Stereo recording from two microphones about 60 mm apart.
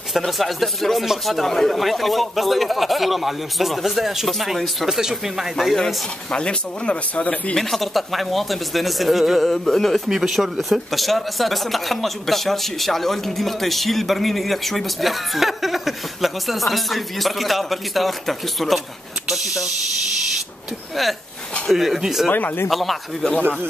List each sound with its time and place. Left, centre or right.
0.1 s speech: centre
6.3 s speech: centre
7.5 s speech: centre
10.0 s speech: centre
20.9 s speech: centre
22.3 s speech: left
22.7 s speech: centre